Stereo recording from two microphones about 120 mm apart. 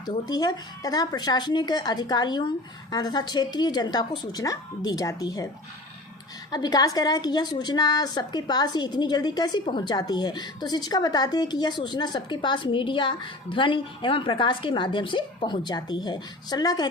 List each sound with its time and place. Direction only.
0.0 s a woman's voice: 35° left (ahead or behind)
6.5 s a woman's voice: 35° left (ahead or behind)